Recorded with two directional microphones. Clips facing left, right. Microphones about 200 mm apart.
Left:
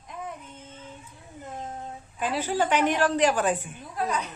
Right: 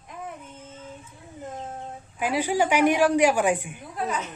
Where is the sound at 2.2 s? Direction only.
10° right (ahead or behind).